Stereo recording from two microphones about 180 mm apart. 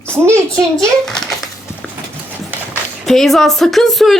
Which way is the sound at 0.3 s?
15° right (ahead or behind).